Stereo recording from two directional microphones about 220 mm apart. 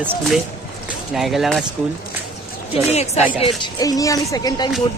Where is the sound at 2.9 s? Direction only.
30° left (ahead or behind).